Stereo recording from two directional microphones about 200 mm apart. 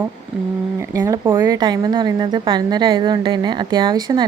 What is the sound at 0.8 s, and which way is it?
A woman's voice, 15° right (ahead or behind).